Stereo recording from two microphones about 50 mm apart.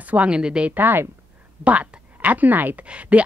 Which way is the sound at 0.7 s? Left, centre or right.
Right.